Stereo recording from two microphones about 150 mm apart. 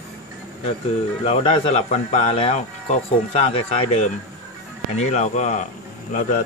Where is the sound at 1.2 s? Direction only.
40° left (ahead or behind).